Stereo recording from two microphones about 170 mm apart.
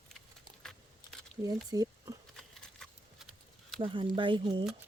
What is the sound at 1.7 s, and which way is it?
Speech, 20° right (ahead or behind).